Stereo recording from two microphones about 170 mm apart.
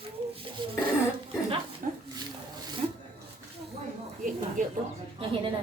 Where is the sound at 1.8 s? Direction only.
50° right (ahead or behind).